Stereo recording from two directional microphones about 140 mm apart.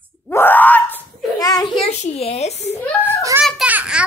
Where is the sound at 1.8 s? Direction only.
50° left (ahead or behind).